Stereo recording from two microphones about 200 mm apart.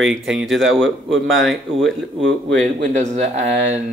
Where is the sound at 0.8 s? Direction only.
75° right (ahead or behind).